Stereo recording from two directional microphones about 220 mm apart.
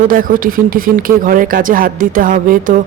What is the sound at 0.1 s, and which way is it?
Speech, 40° right (ahead or behind).